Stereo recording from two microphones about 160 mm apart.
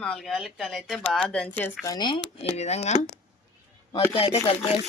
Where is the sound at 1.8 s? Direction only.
25° left (ahead or behind).